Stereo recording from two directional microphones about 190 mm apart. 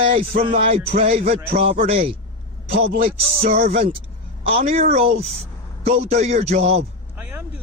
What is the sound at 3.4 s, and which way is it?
Speech, 50° right (ahead or behind).